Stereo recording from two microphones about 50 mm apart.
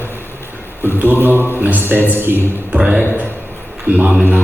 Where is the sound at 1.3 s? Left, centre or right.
Left.